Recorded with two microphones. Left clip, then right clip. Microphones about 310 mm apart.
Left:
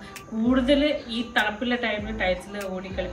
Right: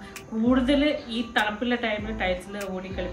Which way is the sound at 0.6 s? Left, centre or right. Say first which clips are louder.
Left 4 dB; centre.